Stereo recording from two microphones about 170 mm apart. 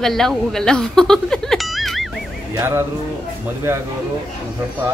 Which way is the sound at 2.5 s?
15° right (ahead or behind).